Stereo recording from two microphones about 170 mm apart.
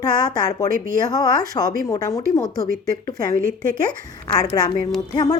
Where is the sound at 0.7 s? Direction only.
55° right (ahead or behind).